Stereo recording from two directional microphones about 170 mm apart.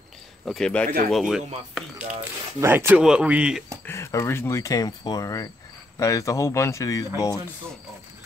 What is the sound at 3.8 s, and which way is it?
Speech, 15° left (ahead or behind).